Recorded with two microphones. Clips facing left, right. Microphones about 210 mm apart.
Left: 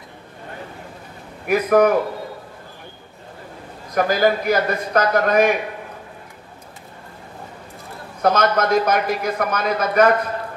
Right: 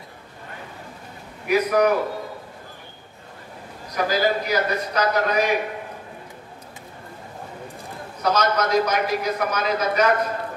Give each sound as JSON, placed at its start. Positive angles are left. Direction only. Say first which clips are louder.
{"t": 1.5, "sound": "a man's voice", "louder": "left 3 dB", "side_deg": 50}
{"t": 3.9, "sound": "a man's voice", "louder": "left 4 dB", "side_deg": 55}
{"t": 8.2, "sound": "speech", "louder": "left 4 dB", "side_deg": 55}